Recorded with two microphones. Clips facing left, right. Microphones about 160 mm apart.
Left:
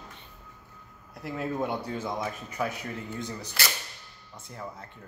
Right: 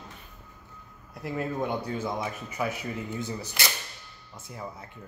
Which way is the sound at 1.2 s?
Centre (ahead or behind).